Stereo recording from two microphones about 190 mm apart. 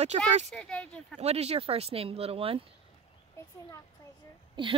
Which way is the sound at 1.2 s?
35° right (ahead or behind).